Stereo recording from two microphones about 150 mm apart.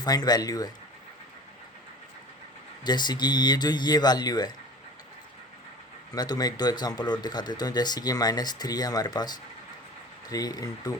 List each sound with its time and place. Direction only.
0.0 s speech: 25° left (ahead or behind)
2.8 s speech: 30° left (ahead or behind)
6.1 s speech: 25° left (ahead or behind)